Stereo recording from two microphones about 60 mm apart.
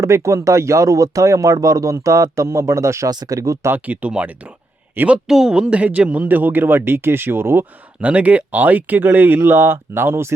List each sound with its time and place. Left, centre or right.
0.0 s speech: right
3.8 s speech: right
5.0 s speech: right
5.3 s speech: centre; by 7.6 s right
8.0 s speech: right